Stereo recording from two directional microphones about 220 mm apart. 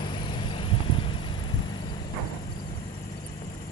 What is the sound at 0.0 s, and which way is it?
Vehicle, 20° left (ahead or behind).